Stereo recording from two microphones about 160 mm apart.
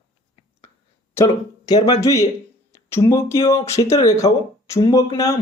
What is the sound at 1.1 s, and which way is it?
Speech, 20° left (ahead or behind).